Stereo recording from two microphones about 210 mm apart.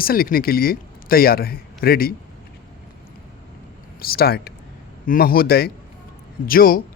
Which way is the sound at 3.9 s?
45° left (ahead or behind).